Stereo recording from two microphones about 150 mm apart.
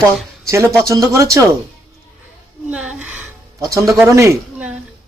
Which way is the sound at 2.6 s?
10° right (ahead or behind).